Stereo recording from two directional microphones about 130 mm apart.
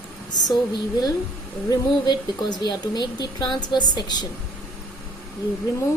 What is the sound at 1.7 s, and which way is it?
A woman's voice, 35° left (ahead or behind).